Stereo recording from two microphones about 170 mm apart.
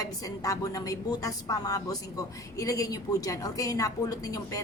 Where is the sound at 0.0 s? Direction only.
20° left (ahead or behind).